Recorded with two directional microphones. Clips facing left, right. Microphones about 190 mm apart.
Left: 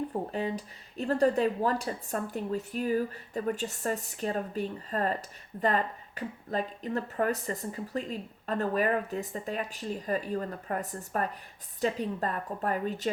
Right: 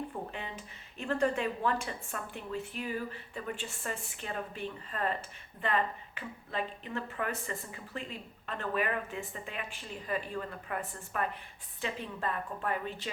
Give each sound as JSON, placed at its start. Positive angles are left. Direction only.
{"t": 0.1, "sound": "speech", "side_deg": 40}